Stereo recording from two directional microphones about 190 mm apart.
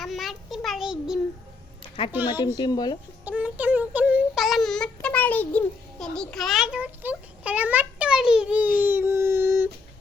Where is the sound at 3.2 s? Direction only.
5° right (ahead or behind).